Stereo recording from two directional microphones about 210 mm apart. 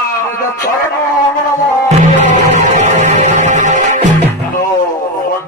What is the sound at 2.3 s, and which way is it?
Music, 35° right (ahead or behind).